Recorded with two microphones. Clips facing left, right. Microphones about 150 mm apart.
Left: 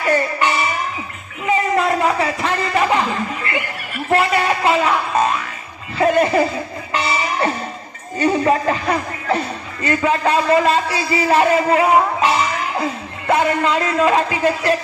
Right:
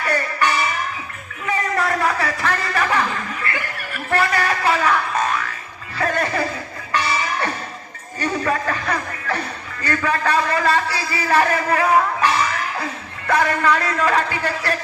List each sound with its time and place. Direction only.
0.0 s music: 20° left (ahead or behind)
1.5 s a sound: 20° left (ahead or behind)
6.0 s neigh: 20° left (ahead or behind)
6.9 s music: 20° left (ahead or behind)
9.8 s a man's voice: 20° left (ahead or behind)